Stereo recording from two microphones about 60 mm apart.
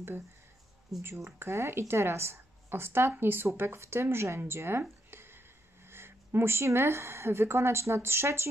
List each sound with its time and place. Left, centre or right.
1.0 s a woman's voice: right
1.4 s a woman's voice: right
5.1 s a sound: right
5.9 s speech: right